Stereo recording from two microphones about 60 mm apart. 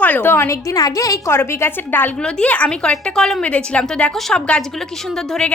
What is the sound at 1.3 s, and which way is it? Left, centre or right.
Speech, left.